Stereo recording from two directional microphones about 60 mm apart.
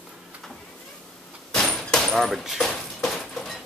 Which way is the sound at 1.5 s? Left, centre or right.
Centre.